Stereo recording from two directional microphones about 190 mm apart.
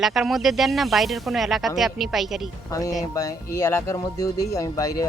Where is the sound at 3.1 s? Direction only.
15° left (ahead or behind).